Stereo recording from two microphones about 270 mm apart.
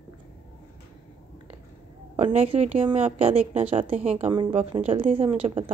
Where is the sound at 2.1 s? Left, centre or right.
Right.